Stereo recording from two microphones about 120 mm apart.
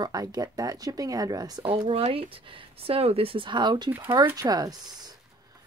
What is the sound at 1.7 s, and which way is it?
Speech, 50° right (ahead or behind).